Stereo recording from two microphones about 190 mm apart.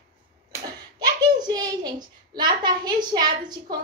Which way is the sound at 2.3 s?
20° right (ahead or behind).